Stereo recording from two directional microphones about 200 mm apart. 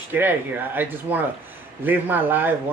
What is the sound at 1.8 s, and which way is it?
Speech, 10° right (ahead or behind).